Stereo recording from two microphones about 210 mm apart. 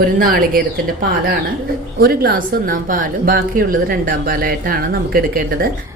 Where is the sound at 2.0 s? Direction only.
45° right (ahead or behind).